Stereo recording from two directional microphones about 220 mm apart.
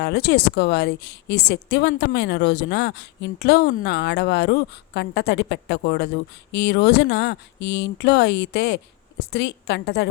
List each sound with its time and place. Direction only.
0.0 s speech: 50° left (ahead or behind)